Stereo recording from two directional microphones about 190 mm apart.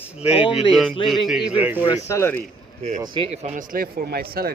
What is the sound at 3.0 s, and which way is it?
Speech, 25° right (ahead or behind).